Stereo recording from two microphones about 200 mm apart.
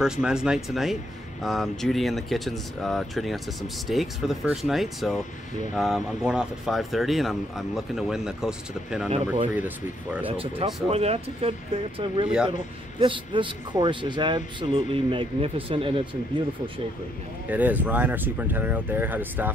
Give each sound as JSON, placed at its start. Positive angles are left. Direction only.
{"t": 0.0, "sound": "speech", "side_deg": -5}
{"t": 10.2, "sound": "speech", "side_deg": -25}
{"t": 17.5, "sound": "speech", "side_deg": -10}